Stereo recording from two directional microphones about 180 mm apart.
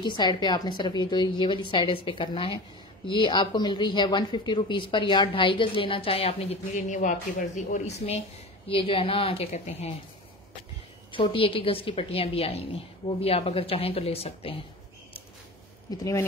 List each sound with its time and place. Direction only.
0.0 s a woman's voice: 25° left (ahead or behind)
11.1 s a woman's voice: 30° left (ahead or behind)
15.9 s a woman's voice: 20° left (ahead or behind)